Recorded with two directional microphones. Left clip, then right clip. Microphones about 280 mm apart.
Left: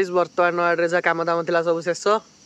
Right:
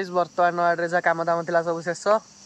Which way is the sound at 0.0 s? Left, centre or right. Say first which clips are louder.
Left 2 dB; centre.